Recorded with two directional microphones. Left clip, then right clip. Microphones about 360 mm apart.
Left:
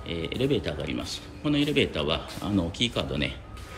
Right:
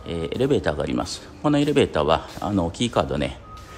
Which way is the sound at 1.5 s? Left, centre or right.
Right.